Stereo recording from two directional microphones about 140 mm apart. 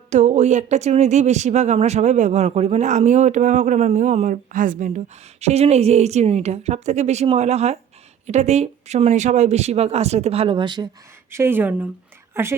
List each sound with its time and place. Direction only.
0.1 s speech: 55° right (ahead or behind); by 10.8 s 35° right (ahead or behind)
11.3 s speech: 15° right (ahead or behind)